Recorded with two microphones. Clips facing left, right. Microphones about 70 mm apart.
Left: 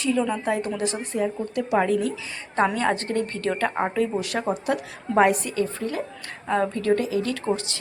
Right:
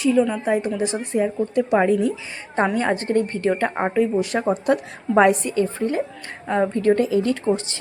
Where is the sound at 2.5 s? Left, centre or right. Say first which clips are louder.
Right 2 dB; centre.